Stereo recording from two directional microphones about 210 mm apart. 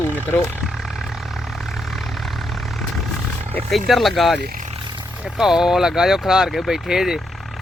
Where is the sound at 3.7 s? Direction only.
Centre (ahead or behind).